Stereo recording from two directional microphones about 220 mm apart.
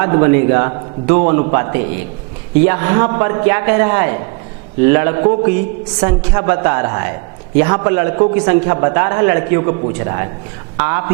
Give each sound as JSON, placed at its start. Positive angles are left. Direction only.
{"t": 0.0, "sound": "a man's voice", "side_deg": -15}